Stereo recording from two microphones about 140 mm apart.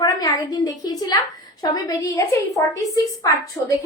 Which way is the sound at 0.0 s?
30° left (ahead or behind).